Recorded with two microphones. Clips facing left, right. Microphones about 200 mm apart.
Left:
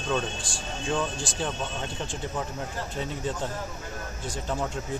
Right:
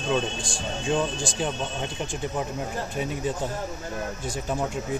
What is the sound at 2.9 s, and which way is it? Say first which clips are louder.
Speech: right 3 dB; 10° right (ahead or behind).